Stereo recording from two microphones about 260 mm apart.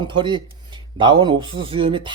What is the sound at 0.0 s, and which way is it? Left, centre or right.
Speech, centre.